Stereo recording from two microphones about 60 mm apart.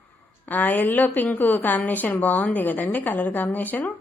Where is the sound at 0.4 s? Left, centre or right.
Left.